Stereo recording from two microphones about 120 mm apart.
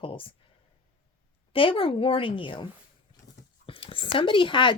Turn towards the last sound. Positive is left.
turn(degrees=45)  # may be behind; listen again after turning